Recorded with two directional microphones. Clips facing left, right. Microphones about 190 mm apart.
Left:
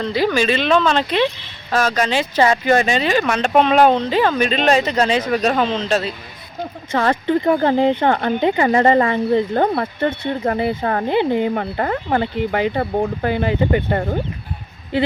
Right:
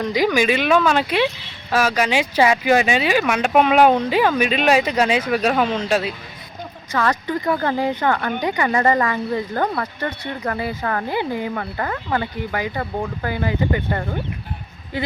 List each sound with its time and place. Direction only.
0.0 s speech: 15° right (ahead or behind)
6.9 s speech: 25° left (ahead or behind)